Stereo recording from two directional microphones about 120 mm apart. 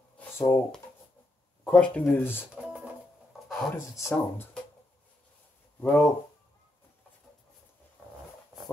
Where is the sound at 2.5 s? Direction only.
10° right (ahead or behind).